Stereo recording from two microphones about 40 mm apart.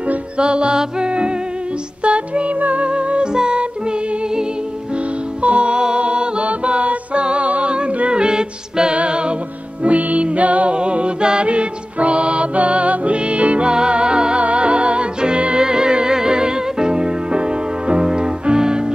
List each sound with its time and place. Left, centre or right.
0.4 s music: right
2.9 s music: right
5.4 s music: right